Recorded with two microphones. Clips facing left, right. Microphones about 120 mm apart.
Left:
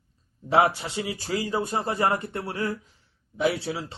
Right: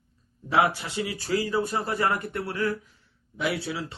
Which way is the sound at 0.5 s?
30° left (ahead or behind).